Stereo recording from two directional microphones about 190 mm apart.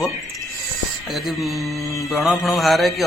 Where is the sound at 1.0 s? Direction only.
Centre (ahead or behind).